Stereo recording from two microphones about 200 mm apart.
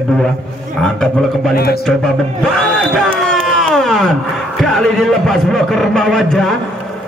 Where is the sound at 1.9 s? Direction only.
5° left (ahead or behind).